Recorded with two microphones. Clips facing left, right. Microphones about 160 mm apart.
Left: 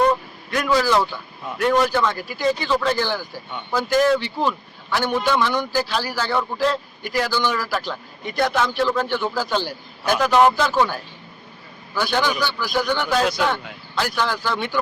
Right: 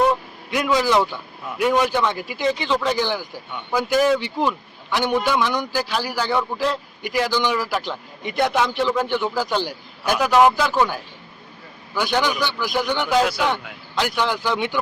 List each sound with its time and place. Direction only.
0.8 s a man's voice: 20° right (ahead or behind)
11.9 s a man's voice: 15° right (ahead or behind)